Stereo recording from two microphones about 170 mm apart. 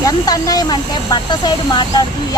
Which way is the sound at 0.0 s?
20° left (ahead or behind).